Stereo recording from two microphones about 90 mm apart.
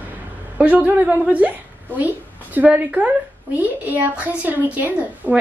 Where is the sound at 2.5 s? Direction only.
15° right (ahead or behind).